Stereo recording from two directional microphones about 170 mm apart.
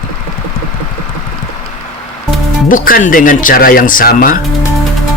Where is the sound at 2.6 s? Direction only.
55° left (ahead or behind).